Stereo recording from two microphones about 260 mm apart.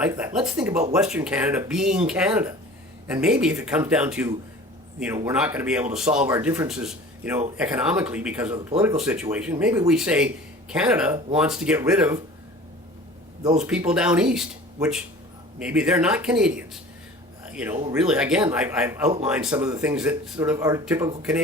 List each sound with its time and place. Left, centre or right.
0.0 s speech: centre
13.4 s speech: right
13.7 s speech: centre
17.4 s a sound: centre
17.9 s speech: centre